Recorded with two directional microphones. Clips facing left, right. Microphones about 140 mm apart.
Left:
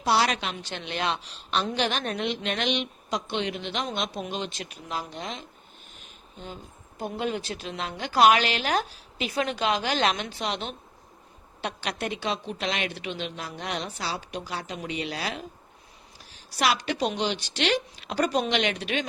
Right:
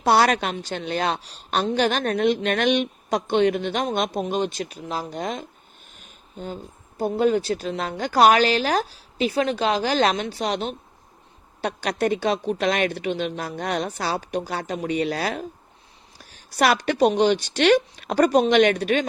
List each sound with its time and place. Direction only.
0.0 s a woman's voice: 50° right (ahead or behind)
0.5 s a woman's voice: 40° right (ahead or behind)